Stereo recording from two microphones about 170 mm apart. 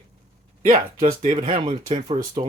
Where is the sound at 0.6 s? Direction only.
50° right (ahead or behind).